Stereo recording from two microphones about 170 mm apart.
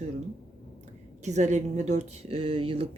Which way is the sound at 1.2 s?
45° right (ahead or behind).